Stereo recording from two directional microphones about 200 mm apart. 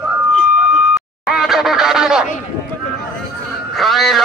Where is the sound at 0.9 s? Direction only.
Centre (ahead or behind).